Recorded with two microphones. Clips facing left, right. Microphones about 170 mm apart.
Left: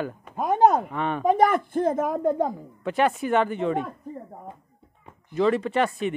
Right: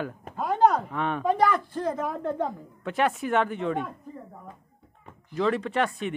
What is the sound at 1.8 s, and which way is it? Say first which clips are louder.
Speech: left 3 dB; 45° left (ahead or behind).